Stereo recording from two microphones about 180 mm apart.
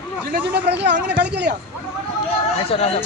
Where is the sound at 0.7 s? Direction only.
70° right (ahead or behind).